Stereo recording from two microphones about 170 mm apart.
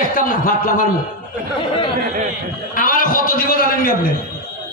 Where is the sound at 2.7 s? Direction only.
55° left (ahead or behind).